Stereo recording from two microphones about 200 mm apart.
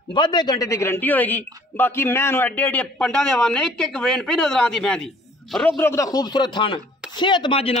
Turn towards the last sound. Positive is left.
turn(degrees=30)  # may be behind; listen again after turning